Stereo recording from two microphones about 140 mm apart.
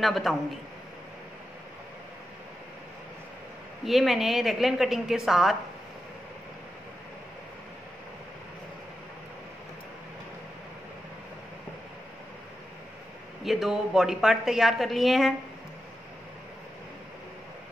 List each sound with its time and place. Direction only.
0.0 s a woman's voice: centre (ahead or behind)
3.8 s a woman's voice: centre (ahead or behind)
13.4 s a woman's voice: centre (ahead or behind)